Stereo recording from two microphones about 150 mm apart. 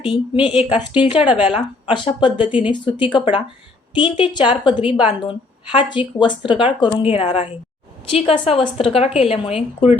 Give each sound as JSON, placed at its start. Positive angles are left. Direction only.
{"t": 0.0, "sound": "speech", "side_deg": -5}
{"t": 0.6, "sound": "speech", "side_deg": 40}